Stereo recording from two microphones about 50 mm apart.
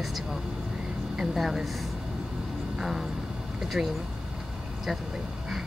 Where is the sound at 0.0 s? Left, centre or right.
Centre.